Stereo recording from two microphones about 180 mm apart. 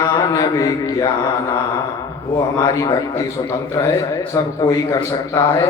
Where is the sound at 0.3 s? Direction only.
20° left (ahead or behind).